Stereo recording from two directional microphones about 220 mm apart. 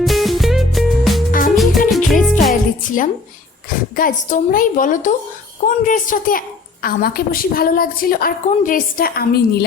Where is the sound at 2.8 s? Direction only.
35° left (ahead or behind).